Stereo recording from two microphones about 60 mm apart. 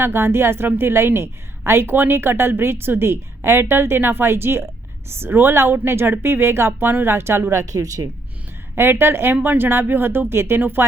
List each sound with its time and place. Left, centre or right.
0.0 s a woman's voice: right
7.6 s speech: right
8.7 s a woman's voice: right